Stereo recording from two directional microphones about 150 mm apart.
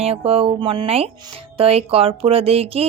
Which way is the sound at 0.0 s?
40° right (ahead or behind).